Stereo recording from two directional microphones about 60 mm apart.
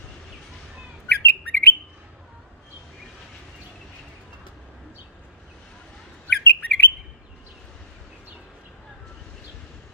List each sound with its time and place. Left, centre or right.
1.0 s bird: left
6.2 s bird: left